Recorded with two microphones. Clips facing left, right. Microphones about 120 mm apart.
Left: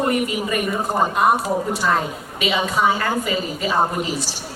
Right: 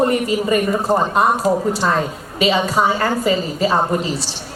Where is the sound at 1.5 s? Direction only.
45° right (ahead or behind).